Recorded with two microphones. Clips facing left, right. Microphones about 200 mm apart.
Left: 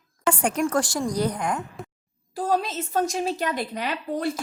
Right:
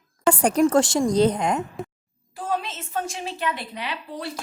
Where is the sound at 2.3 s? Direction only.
40° left (ahead or behind).